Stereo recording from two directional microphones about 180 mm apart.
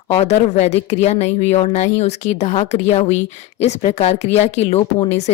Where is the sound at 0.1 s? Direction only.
35° left (ahead or behind).